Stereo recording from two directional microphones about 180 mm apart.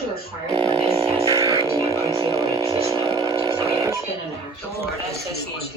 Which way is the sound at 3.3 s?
20° right (ahead or behind).